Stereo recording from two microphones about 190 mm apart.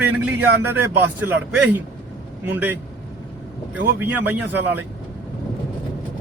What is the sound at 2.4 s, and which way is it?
A man's voice, 10° right (ahead or behind).